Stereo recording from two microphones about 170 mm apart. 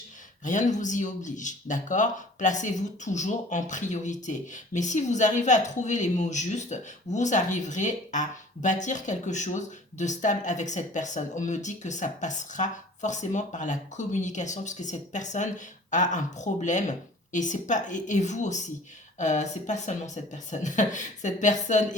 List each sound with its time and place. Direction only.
0.4 s speech: 45° left (ahead or behind)